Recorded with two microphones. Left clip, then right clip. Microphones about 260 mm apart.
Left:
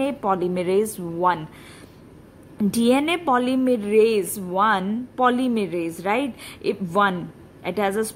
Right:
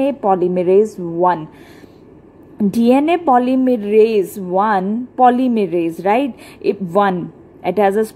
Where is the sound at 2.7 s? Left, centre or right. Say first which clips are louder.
Right 6 dB; centre.